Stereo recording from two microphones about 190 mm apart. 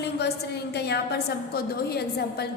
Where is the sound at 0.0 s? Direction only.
60° left (ahead or behind).